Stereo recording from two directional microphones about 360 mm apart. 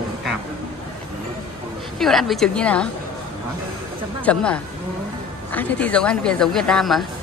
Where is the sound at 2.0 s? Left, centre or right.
Centre.